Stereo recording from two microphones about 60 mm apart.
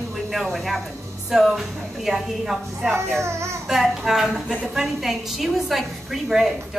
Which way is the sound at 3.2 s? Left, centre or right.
Right.